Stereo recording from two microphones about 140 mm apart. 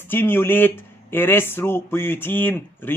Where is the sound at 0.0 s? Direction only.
15° left (ahead or behind).